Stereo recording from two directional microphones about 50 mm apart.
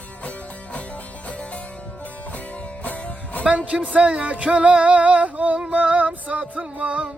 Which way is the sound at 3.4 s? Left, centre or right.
Right.